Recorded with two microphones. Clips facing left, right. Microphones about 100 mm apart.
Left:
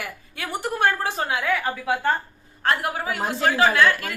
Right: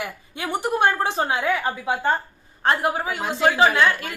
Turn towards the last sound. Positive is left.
turn(degrees=-20)  # may be behind; listen again after turning